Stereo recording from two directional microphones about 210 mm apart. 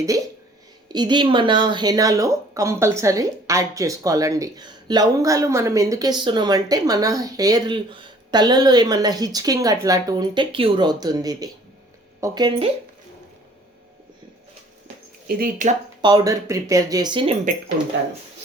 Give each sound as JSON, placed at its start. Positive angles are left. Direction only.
{"t": 0.9, "sound": "speech", "side_deg": -20}
{"t": 15.4, "sound": "speech", "side_deg": -40}
{"t": 16.0, "sound": "speech", "side_deg": -20}